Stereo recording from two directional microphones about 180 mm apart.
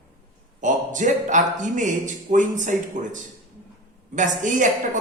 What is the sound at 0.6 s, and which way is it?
A man's voice, 45° right (ahead or behind).